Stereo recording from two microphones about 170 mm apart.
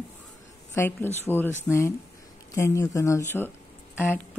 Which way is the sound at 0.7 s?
15° left (ahead or behind).